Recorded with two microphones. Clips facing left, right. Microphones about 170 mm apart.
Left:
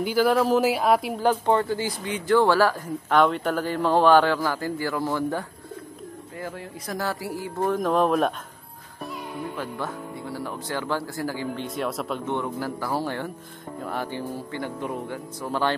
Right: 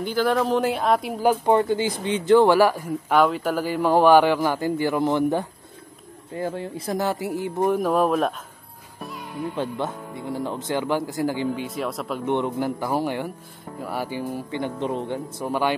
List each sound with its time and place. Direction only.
0.0 s speech: 5° left (ahead or behind)
1.2 s speech: 10° right (ahead or behind)
9.6 s speech: 20° right (ahead or behind)
11.5 s speech: centre (ahead or behind)
12.3 s speech: 20° right (ahead or behind)